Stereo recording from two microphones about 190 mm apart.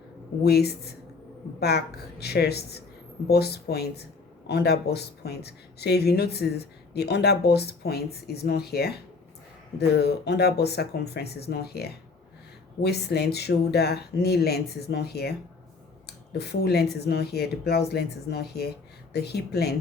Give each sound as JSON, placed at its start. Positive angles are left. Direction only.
{"t": 0.4, "sound": "speech", "side_deg": 55}